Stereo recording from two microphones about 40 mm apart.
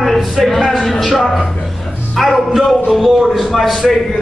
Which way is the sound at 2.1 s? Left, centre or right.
Centre.